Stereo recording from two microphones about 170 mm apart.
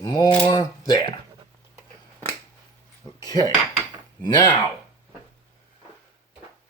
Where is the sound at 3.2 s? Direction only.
20° left (ahead or behind).